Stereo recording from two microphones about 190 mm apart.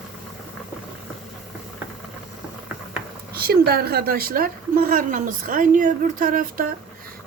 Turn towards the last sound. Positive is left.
turn(degrees=-45)  # may be behind; listen again after turning